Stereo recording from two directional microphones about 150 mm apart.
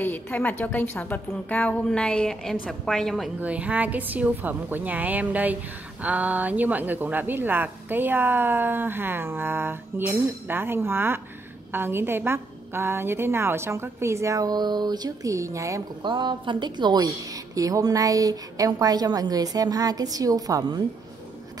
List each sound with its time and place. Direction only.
0.0 s a woman's voice: 10° left (ahead or behind)
3.3 s speech: 10° right (ahead or behind)
16.0 s a woman's voice: 30° right (ahead or behind)